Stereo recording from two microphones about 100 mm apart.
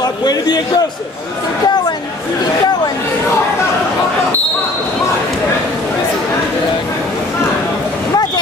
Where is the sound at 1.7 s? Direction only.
45° left (ahead or behind).